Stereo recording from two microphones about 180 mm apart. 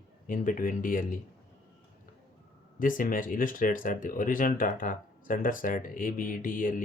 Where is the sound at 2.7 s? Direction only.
50° left (ahead or behind).